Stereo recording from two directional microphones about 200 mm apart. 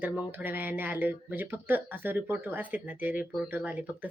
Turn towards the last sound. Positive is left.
turn(degrees=-10)  # may be behind; listen again after turning